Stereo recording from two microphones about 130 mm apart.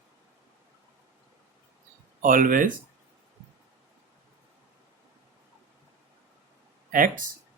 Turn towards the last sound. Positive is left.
turn(degrees=-90)